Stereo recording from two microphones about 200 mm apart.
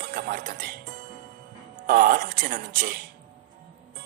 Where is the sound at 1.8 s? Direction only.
45° right (ahead or behind).